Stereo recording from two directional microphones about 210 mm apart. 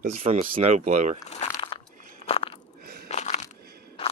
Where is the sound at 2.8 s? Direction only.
45° right (ahead or behind).